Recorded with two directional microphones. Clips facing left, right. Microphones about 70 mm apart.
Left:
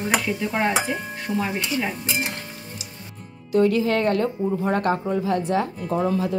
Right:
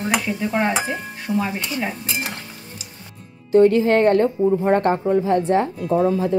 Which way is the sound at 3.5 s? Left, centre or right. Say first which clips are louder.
Right 5 dB; right.